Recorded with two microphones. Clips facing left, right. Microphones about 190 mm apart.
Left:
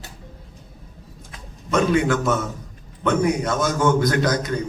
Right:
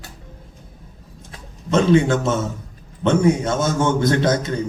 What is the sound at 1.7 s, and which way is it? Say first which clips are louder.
A man's voice: right 3 dB; 25° right (ahead or behind).